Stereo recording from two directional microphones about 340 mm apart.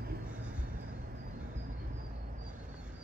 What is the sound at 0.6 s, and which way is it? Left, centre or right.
Vehicle, right.